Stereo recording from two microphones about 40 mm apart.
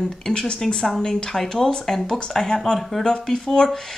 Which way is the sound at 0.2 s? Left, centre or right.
Centre.